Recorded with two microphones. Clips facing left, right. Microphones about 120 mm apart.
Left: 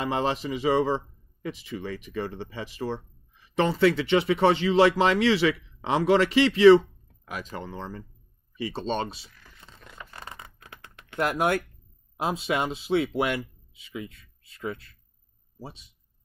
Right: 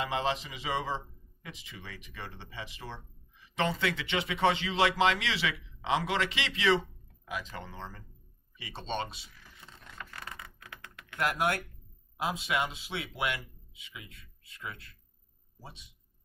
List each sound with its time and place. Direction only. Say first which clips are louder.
0.0 s speech: left 5 dB; 40° left (ahead or behind)
10.1 s a sound: left 2 dB; 25° left (ahead or behind)
12.2 s speech: left 5 dB; 30° left (ahead or behind)